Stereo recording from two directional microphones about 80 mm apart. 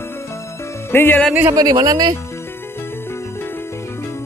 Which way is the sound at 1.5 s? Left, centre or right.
Right.